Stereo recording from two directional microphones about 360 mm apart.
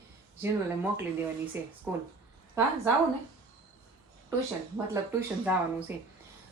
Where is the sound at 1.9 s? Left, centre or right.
Centre.